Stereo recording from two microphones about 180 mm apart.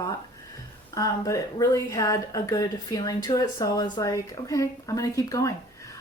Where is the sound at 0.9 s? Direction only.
20° left (ahead or behind).